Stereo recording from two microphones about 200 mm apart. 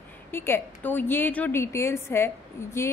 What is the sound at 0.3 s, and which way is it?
A woman's voice, 10° left (ahead or behind).